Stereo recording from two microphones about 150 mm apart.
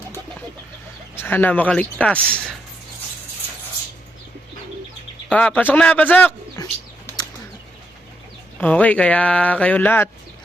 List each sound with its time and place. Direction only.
1.1 s speech: 15° left (ahead or behind)
5.3 s speech: 10° left (ahead or behind)
6.6 s bird: 25° left (ahead or behind)
8.5 s speech: 10° left (ahead or behind)